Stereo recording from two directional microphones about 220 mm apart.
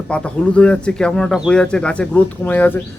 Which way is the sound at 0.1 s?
5° left (ahead or behind).